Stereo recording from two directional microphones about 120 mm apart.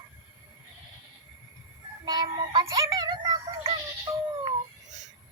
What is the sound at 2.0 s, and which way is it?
Synthetic singing, 35° right (ahead or behind).